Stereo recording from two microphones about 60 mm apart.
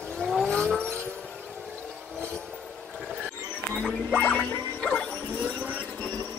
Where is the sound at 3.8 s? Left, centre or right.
Centre.